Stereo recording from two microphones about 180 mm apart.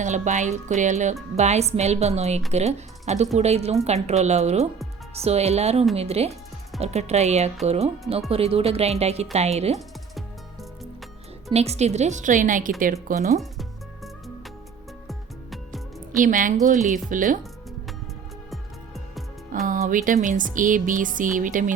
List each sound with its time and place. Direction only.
0.0 s speech: 40° right (ahead or behind)
9.7 s music: centre (ahead or behind)
11.5 s speech: 35° right (ahead or behind)
13.4 s music: centre (ahead or behind)
16.2 s speech: 50° right (ahead or behind)
18.5 s music: centre (ahead or behind)
19.6 s speech: 50° right (ahead or behind)